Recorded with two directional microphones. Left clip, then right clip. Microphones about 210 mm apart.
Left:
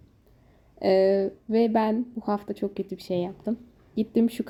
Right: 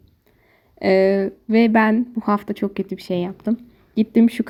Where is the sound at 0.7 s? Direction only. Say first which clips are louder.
Right 5 dB; 25° right (ahead or behind).